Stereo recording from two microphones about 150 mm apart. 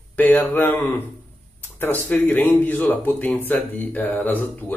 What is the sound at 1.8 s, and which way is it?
Speech, 10° left (ahead or behind).